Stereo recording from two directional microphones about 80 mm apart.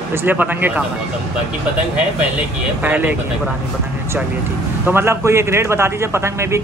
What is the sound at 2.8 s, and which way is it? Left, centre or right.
Speech, right.